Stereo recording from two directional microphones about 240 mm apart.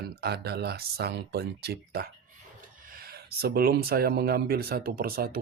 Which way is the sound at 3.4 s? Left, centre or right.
Right.